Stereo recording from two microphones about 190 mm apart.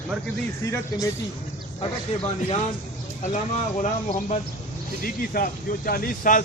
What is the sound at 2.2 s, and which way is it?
Speech, 30° left (ahead or behind).